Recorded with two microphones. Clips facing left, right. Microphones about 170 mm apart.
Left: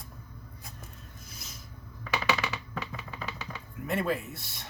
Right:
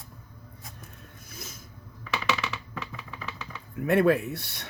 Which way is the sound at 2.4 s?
Centre (ahead or behind).